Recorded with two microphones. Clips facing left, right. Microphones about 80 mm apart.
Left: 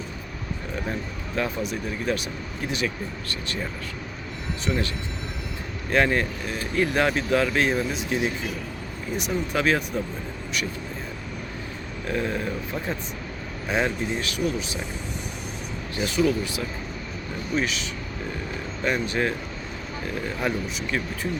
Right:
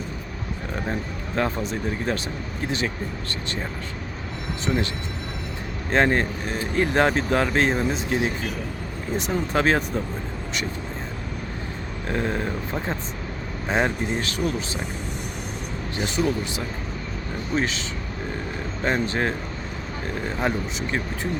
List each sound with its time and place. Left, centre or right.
1.4 s speech: right
4.6 s speech: right
5.9 s speech: right
9.3 s speech: right
12.0 s speech: right
16.2 s speech: right
17.5 s speech: right
18.8 s speech: right